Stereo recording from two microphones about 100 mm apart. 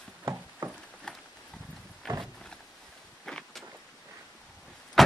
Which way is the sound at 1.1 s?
5° left (ahead or behind).